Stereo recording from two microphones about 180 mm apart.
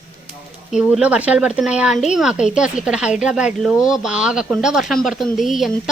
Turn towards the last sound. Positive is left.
turn(degrees=0)  # may be behind; listen again after turning